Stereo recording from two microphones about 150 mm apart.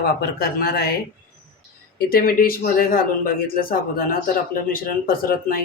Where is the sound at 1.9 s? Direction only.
80° left.